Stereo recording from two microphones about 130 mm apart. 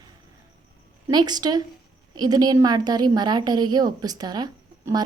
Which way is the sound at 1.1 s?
30° right (ahead or behind).